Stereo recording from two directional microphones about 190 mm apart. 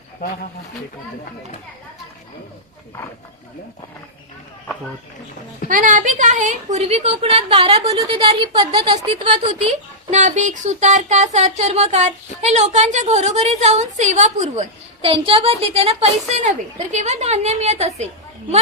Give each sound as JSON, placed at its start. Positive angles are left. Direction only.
{"t": 5.6, "sound": "a woman's voice", "side_deg": -45}